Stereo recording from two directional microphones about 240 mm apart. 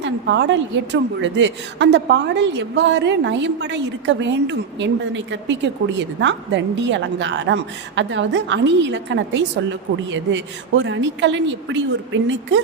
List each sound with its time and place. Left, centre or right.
0.0 s a woman's voice: right